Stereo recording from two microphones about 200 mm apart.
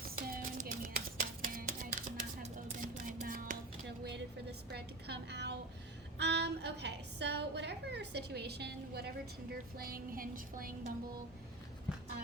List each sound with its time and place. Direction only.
0.0 s music: 45° right (ahead or behind)
4.7 s a sound: 55° right (ahead or behind)
6.1 s a woman's voice: 55° right (ahead or behind)